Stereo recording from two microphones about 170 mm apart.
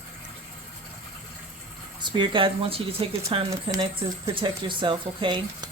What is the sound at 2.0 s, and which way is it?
Speech, 25° right (ahead or behind).